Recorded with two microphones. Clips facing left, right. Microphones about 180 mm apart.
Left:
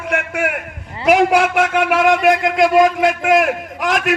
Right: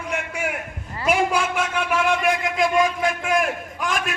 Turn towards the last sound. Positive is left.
turn(degrees=90)